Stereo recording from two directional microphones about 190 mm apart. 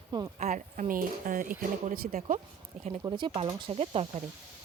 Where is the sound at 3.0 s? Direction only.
20° right (ahead or behind).